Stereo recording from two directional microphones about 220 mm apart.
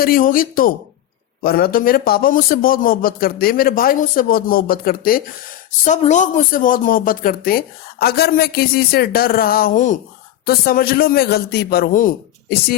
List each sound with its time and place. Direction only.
0.0 s a man's voice: 40° left (ahead or behind)